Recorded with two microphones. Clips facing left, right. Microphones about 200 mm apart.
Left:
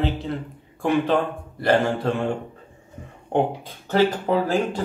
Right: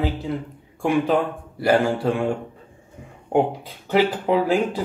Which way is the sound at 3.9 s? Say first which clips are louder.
Right 1 dB; 10° right (ahead or behind).